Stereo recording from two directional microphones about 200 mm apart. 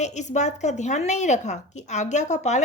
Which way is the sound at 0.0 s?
35° left (ahead or behind).